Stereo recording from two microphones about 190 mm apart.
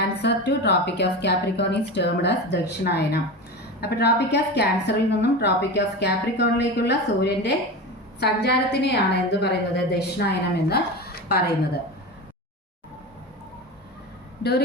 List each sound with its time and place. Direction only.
0.2 s a woman's voice: 60° left (ahead or behind)